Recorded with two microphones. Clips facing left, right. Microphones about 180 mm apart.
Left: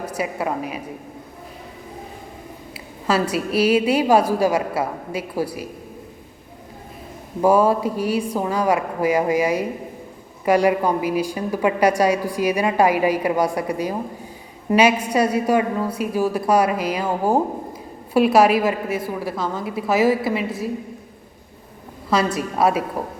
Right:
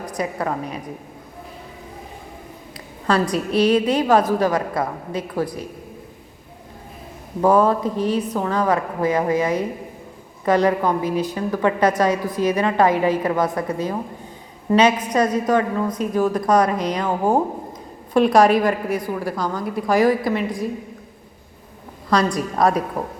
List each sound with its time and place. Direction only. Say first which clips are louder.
0.0 s a woman's voice: even; 10° left (ahead or behind)
2.7 s a woman's voice: right 1 dB; 5° left (ahead or behind)
7.4 s a woman's voice: even; 10° left (ahead or behind)
22.1 s a woman's voice: right 1 dB; 5° left (ahead or behind)